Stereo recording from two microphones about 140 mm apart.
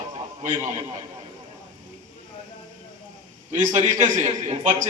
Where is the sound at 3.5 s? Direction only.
60° right (ahead or behind).